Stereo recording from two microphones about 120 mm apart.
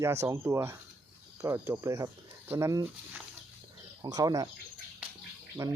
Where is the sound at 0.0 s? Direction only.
25° right (ahead or behind).